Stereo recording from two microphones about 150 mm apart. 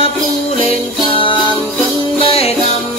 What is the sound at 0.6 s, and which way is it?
Music, 35° left (ahead or behind).